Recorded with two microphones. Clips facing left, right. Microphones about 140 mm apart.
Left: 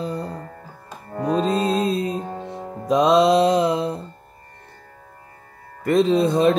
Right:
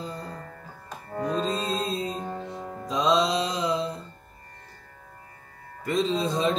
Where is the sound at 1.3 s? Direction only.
70° left (ahead or behind).